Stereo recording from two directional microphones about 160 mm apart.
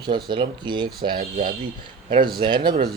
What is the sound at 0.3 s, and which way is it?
A man's voice, 30° right (ahead or behind).